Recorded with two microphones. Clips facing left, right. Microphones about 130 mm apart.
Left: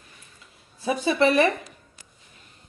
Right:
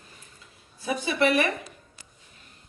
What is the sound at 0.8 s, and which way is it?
Speech, 25° left (ahead or behind).